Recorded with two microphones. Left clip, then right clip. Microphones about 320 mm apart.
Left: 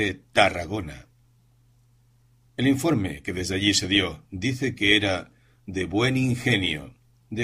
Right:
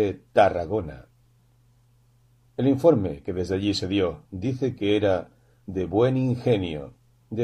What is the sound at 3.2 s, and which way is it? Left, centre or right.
A man's voice, left.